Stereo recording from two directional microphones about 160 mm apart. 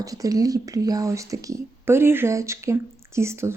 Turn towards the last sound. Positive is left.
turn(degrees=-15)  # may be behind; listen again after turning